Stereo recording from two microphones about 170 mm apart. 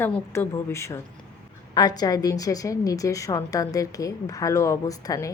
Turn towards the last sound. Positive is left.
turn(degrees=20)  # may be behind; listen again after turning